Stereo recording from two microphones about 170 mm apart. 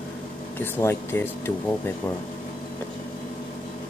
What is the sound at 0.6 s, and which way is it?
Speech, 15° left (ahead or behind).